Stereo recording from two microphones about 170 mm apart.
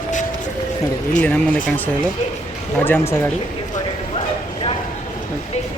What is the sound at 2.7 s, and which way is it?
Speech, 10° left (ahead or behind).